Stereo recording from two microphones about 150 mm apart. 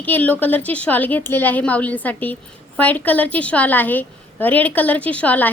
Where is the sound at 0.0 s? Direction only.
10° left (ahead or behind).